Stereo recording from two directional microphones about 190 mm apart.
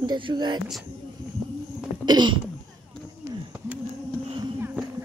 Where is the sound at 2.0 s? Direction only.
25° right (ahead or behind).